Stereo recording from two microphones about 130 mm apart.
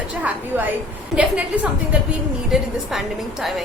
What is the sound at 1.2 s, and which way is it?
A woman's voice, 10° right (ahead or behind).